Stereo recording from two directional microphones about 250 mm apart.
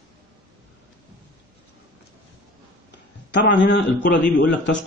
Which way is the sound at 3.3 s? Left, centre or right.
Left.